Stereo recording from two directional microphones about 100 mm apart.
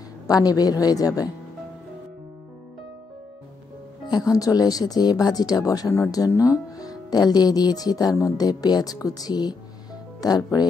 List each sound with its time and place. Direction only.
0.3 s speech: 40° left (ahead or behind)
4.1 s speech: 35° left (ahead or behind)